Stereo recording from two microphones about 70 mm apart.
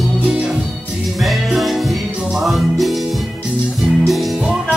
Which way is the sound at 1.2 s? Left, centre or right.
Centre.